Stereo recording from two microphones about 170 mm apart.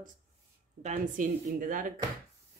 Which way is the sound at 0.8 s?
50° right (ahead or behind).